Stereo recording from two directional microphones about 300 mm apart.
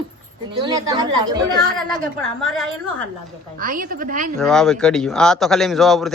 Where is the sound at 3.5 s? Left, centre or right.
Right.